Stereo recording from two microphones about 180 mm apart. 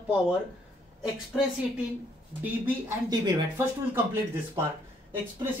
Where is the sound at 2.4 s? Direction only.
10° right (ahead or behind).